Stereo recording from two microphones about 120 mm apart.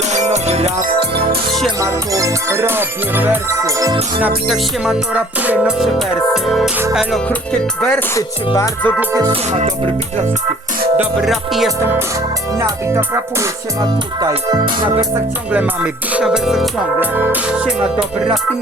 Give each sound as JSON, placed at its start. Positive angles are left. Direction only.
{"t": 0.1, "sound": "music", "side_deg": -70}
{"t": 1.8, "sound": "music", "side_deg": -25}
{"t": 4.4, "sound": "music", "side_deg": -5}
{"t": 7.8, "sound": "speech", "side_deg": 10}
{"t": 8.1, "sound": "speech", "side_deg": 25}
{"t": 9.5, "sound": "music", "side_deg": -75}
{"t": 10.9, "sound": "music", "side_deg": -5}
{"t": 12.5, "sound": "music", "side_deg": -20}
{"t": 14.2, "sound": "music", "side_deg": -35}
{"t": 15.5, "sound": "music", "side_deg": -10}
{"t": 17.0, "sound": "music", "side_deg": -15}